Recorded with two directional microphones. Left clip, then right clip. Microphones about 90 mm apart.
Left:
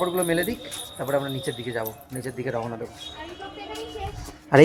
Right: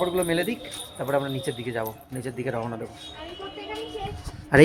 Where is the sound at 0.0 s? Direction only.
20° right (ahead or behind).